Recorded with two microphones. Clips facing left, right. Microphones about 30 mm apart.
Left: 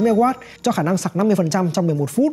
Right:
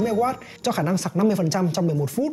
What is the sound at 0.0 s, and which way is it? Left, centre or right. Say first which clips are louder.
Speech: left 6 dB; left.